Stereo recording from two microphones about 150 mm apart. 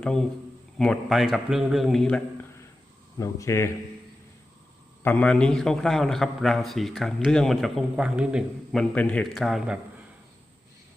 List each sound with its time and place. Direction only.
0.0 s a man's voice: 5° left (ahead or behind)
3.2 s a man's voice: 20° left (ahead or behind)
5.0 s a man's voice: 10° left (ahead or behind)